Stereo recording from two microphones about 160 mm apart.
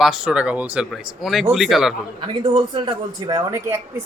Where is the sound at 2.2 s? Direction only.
30° right (ahead or behind).